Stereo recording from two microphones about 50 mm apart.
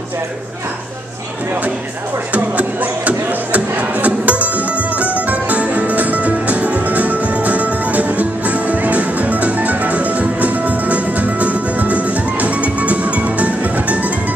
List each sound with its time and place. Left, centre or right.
2.3 s music: right